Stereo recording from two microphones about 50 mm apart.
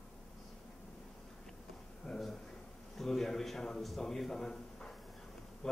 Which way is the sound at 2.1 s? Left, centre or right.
Centre.